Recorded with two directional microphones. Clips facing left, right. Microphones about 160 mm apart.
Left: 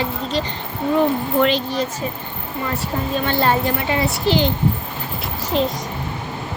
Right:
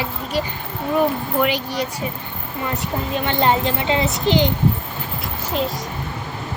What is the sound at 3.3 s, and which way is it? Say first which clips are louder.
A woman's voice: right 1 dB; 20° right (ahead or behind).